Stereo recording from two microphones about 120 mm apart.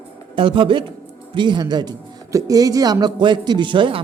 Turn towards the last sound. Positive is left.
turn(degrees=-45)  # may be behind; listen again after turning